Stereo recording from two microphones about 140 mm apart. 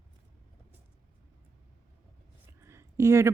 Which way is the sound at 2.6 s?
20° right (ahead or behind).